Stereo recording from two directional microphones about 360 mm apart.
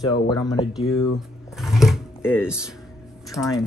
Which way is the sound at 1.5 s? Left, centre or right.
Centre.